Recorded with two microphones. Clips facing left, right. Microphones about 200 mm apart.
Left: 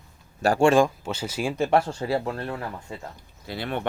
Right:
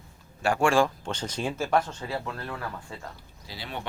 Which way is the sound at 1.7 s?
30° left (ahead or behind).